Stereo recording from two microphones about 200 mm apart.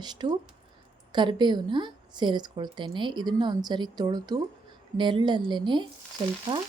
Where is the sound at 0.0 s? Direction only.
20° right (ahead or behind).